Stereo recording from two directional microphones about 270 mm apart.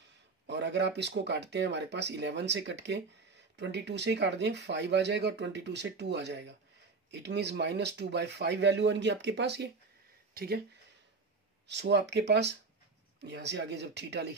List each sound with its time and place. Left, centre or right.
0.5 s speech: right
11.6 s speech: right